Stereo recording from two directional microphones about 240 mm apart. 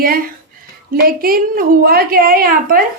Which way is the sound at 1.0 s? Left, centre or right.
Right.